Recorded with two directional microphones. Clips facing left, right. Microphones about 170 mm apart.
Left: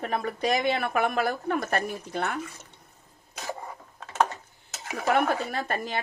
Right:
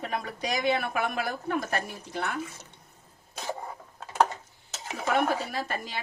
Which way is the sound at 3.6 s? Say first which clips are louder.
Right 1 dB; 10° right (ahead or behind).